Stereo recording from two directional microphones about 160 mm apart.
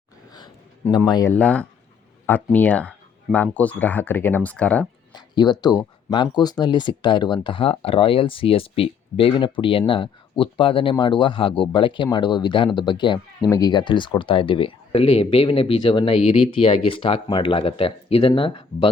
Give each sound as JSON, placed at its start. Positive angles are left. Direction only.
{"t": 0.3, "sound": "a sound", "side_deg": 25}
{"t": 1.3, "sound": "speech", "side_deg": 10}
{"t": 5.1, "sound": "speech", "side_deg": 25}